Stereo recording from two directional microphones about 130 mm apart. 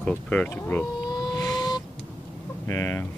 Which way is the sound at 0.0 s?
10° left (ahead or behind).